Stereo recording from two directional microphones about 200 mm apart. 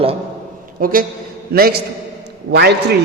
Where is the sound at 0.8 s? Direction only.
45° right (ahead or behind).